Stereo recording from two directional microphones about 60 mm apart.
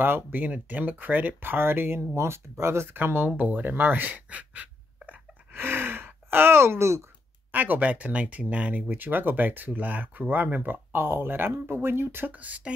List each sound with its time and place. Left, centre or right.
0.0 s speech: right
3.0 s speech: right
5.0 s a sound: right
7.5 s speech: right
12.3 s speech: right